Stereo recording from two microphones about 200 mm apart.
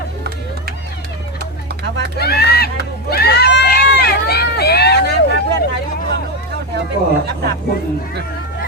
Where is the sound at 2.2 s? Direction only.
50° left (ahead or behind).